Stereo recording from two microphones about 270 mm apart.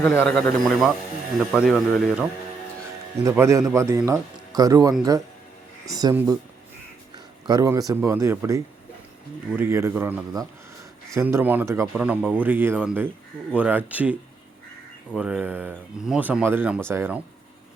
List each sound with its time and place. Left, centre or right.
0.0 s speech: centre
3.2 s speech: centre
7.4 s speech: centre